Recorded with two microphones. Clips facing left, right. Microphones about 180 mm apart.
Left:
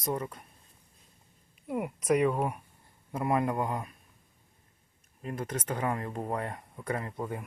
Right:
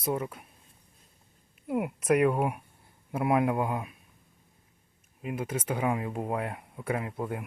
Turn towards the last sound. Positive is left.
turn(degrees=-5)  # may be behind; listen again after turning